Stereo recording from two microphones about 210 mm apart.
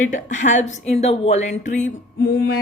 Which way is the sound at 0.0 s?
35° left (ahead or behind).